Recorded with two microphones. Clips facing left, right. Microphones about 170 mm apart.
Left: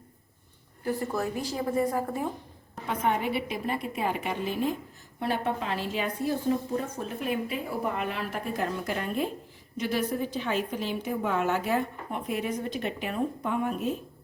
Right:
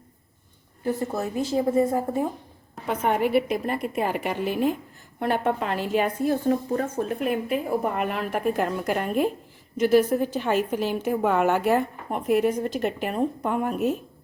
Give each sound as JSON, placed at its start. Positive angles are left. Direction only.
{"t": 0.9, "sound": "a woman's voice", "side_deg": -20}
{"t": 2.8, "sound": "a woman's voice", "side_deg": -55}
{"t": 11.0, "sound": "a woman's voice", "side_deg": -60}
{"t": 11.7, "sound": "a woman's voice", "side_deg": -45}